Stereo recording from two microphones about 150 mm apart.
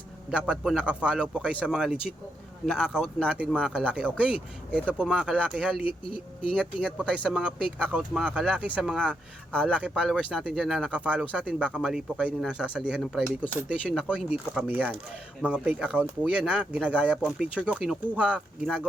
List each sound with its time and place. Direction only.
0.3 s speech: 5° right (ahead or behind)
5.8 s speech: 35° left (ahead or behind)
6.8 s speech: 5° left (ahead or behind)
7.3 s speech: 5° right (ahead or behind)
9.5 s speech: 5° left (ahead or behind)